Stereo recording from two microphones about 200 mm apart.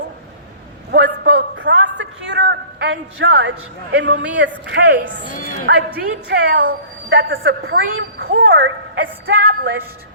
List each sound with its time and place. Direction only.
0.9 s a sound: 60° right (ahead or behind)
3.9 s a woman's voice: 60° right (ahead or behind)
5.3 s a woman's voice: 40° left (ahead or behind)
6.0 s a woman's voice: 55° right (ahead or behind)
7.6 s speech: 55° right (ahead or behind)